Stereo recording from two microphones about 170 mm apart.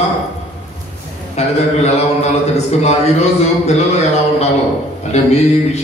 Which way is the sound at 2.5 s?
40° left (ahead or behind).